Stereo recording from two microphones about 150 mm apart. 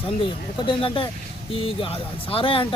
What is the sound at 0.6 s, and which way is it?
Speech, 35° left (ahead or behind).